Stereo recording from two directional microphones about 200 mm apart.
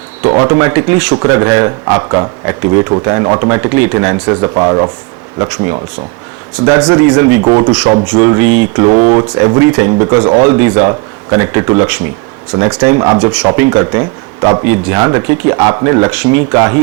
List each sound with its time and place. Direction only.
0.2 s speech: 20° right (ahead or behind)
6.7 s speech: 15° right (ahead or behind)